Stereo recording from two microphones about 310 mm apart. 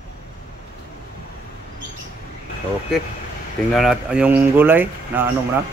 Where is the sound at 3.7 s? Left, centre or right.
Centre.